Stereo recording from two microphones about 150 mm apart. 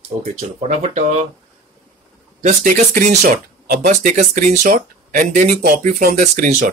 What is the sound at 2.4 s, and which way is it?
Speech, 60° right (ahead or behind).